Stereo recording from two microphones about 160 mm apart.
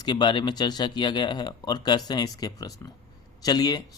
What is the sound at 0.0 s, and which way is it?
Speech, 25° left (ahead or behind).